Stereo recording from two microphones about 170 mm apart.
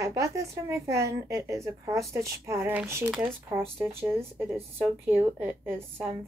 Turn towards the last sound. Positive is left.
turn(degrees=-10)  # may be behind; listen again after turning